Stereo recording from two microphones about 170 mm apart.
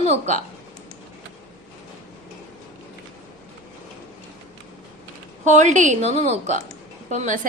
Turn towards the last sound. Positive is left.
turn(degrees=-50)  # may be behind; listen again after turning